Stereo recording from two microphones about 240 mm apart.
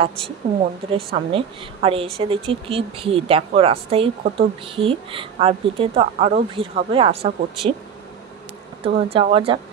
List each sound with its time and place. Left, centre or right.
0.9 s speech: right
8.8 s speech: right